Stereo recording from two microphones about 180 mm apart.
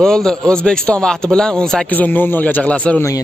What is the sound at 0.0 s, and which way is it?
Speech, 5° left (ahead or behind).